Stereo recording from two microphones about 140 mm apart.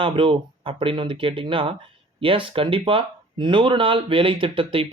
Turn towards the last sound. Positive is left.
turn(degrees=-40)  # may be behind; listen again after turning